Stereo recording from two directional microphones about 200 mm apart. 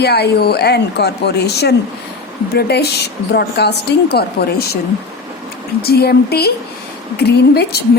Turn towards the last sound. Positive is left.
turn(degrees=55)  # may be behind; listen again after turning